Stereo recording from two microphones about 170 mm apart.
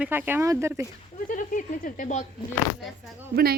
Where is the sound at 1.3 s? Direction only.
50° left (ahead or behind).